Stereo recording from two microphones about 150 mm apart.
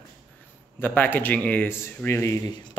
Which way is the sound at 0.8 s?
10° left (ahead or behind).